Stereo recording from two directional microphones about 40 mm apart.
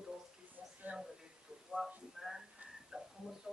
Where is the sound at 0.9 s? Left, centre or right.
Right.